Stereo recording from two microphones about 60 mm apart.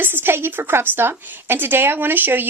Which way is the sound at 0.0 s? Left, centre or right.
Right.